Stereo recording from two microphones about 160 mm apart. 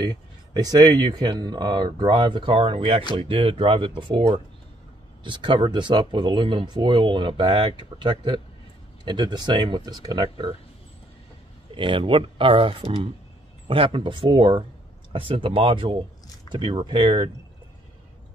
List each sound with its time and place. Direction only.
0.0 s speech: 25° right (ahead or behind)
11.7 s speech: 30° right (ahead or behind)